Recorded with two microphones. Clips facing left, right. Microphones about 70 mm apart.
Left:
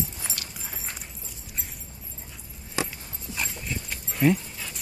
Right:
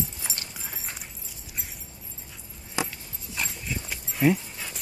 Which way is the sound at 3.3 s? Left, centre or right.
Centre.